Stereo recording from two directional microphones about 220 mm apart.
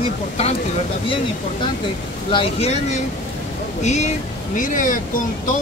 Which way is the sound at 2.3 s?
25° left (ahead or behind).